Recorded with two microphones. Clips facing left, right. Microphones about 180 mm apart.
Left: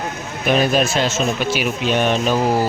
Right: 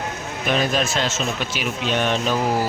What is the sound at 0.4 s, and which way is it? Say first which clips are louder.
A man's voice: left 5 dB; 10° left (ahead or behind).